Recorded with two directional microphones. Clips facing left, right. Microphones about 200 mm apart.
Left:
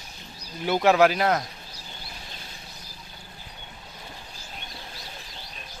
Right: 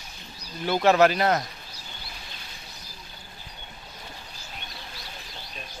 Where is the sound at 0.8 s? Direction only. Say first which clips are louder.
Even; 5° left (ahead or behind).